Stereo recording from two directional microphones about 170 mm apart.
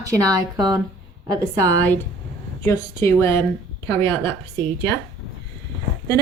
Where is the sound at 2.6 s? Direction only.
15° left (ahead or behind).